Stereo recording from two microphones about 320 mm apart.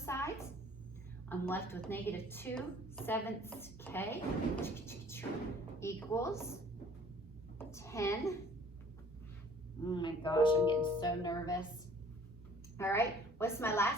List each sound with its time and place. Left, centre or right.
0.0 s a sound: centre
1.3 s a woman's voice: centre
7.6 s a woman's voice: centre
9.8 s a woman's voice: centre
12.7 s a woman's voice: centre